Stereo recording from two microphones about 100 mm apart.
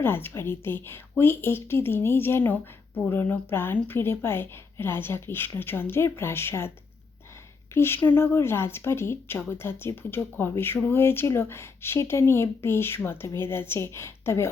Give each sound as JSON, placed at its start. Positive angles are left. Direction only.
{"t": 0.0, "sound": "speech", "side_deg": 20}
{"t": 7.7, "sound": "speech", "side_deg": 25}